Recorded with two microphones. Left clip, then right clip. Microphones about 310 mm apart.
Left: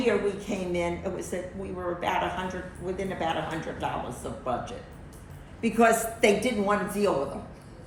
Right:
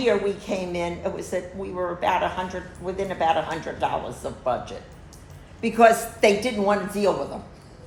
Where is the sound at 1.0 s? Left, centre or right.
Right.